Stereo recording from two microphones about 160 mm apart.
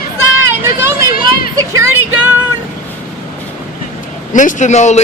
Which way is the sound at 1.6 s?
15° right (ahead or behind).